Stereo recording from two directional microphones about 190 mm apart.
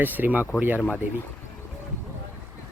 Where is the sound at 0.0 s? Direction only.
10° right (ahead or behind).